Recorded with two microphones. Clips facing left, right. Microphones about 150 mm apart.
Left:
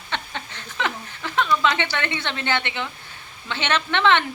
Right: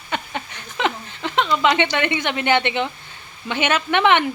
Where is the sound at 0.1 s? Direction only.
15° right (ahead or behind).